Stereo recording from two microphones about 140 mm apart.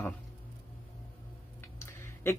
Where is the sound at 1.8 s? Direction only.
15° left (ahead or behind).